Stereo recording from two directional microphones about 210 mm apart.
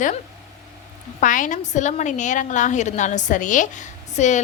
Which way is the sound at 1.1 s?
40° left (ahead or behind).